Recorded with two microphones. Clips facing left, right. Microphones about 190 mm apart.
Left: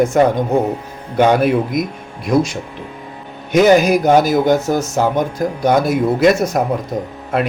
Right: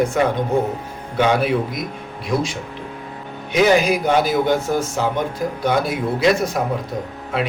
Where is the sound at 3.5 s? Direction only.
45° left (ahead or behind).